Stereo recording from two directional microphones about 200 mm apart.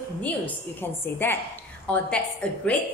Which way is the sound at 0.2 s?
10° left (ahead or behind).